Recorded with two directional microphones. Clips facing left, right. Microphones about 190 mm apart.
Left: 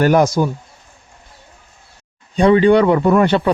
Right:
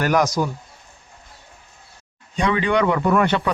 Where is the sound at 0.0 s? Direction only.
30° left (ahead or behind).